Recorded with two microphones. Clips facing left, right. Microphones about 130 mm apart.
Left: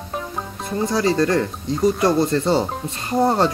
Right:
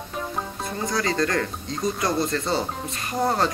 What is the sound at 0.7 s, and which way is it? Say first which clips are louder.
Speech: left 7 dB; 25° left (ahead or behind).